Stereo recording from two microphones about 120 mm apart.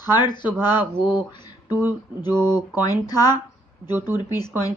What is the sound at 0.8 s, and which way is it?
Speech, 15° right (ahead or behind).